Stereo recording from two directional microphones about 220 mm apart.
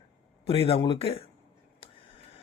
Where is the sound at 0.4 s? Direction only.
25° left (ahead or behind).